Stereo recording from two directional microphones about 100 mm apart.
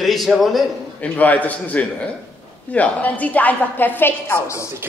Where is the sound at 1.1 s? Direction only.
15° left (ahead or behind).